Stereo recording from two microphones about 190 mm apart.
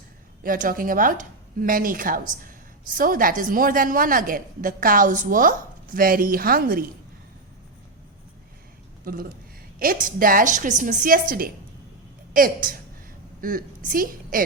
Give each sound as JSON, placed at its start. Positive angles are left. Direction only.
{"t": 0.4, "sound": "a woman's voice", "side_deg": -50}
{"t": 9.1, "sound": "a woman's voice", "side_deg": -50}